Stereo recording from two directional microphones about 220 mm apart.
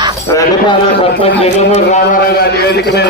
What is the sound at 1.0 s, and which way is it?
A man's voice, 25° left (ahead or behind).